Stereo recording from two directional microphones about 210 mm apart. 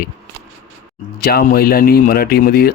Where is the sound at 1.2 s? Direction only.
45° left (ahead or behind).